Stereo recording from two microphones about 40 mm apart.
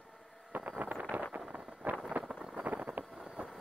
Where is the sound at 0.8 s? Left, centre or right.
Right.